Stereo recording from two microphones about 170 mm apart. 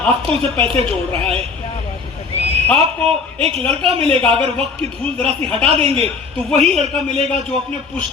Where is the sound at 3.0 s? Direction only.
35° right (ahead or behind).